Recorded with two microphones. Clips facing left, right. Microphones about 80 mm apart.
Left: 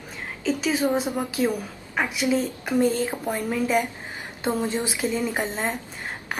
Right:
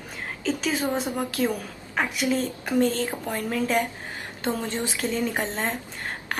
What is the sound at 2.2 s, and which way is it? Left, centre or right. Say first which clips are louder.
Speech: left 2 dB; centre.